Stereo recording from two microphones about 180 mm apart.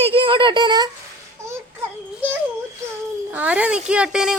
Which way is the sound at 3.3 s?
10° right (ahead or behind).